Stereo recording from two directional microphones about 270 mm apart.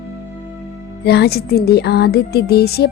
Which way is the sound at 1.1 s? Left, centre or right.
Left.